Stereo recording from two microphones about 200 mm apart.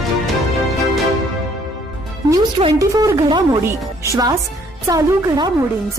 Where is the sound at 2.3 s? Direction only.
20° right (ahead or behind).